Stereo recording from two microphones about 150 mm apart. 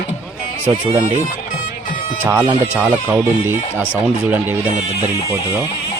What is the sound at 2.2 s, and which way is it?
Speech, 15° right (ahead or behind).